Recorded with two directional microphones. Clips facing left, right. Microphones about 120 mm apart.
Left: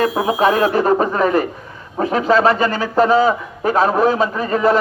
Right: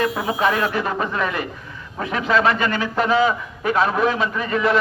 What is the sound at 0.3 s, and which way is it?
Speech, 40° left (ahead or behind).